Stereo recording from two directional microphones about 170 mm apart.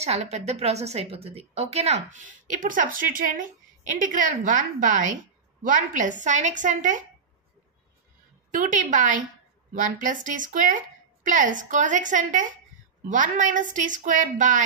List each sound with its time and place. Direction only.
0.0 s a woman's voice: 40° right (ahead or behind)
8.5 s a woman's voice: 50° right (ahead or behind)